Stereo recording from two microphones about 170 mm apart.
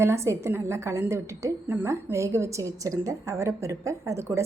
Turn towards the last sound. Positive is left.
turn(degrees=-15)  # may be behind; listen again after turning